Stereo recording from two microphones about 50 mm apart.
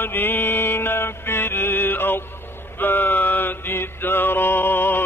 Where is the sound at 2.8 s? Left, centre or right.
Left.